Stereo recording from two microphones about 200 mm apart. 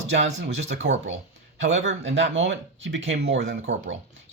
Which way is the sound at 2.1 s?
70° right (ahead or behind).